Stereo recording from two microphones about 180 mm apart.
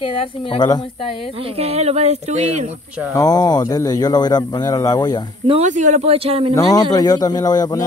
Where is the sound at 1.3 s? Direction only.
30° right (ahead or behind).